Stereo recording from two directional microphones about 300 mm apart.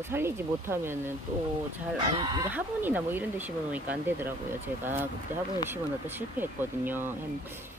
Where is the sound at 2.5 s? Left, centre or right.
Centre.